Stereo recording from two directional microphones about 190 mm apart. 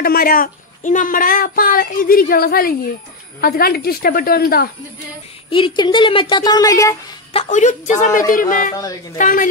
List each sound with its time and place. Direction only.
0.0 s speech: 50° left (ahead or behind)
5.5 s a woman's voice: 25° left (ahead or behind)
7.3 s a woman's voice: 40° left (ahead or behind)